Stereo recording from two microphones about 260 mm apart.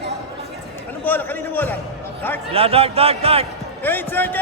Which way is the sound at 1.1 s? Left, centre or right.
Centre.